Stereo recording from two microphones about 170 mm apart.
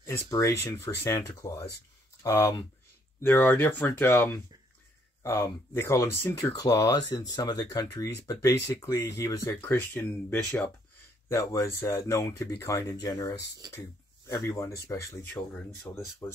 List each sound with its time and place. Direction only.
0.3 s speech: 20° left (ahead or behind)